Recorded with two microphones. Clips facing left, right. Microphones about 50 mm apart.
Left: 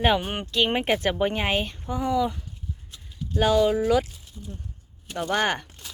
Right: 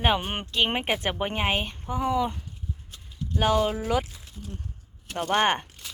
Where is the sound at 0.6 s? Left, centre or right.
Right.